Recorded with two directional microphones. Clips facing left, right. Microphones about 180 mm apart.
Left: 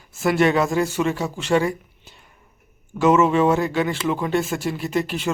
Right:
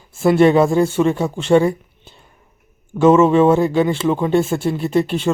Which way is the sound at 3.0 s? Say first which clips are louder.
Right 5 dB; 30° right (ahead or behind).